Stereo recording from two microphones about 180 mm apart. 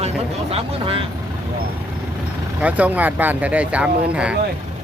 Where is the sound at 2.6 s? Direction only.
10° right (ahead or behind).